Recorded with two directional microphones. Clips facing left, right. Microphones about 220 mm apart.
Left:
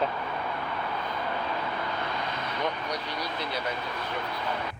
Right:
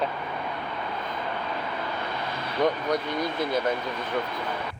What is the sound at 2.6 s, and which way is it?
Speech, 50° right (ahead or behind).